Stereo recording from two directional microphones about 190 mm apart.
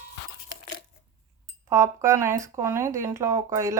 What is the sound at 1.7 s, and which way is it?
A woman's voice, 15° right (ahead or behind).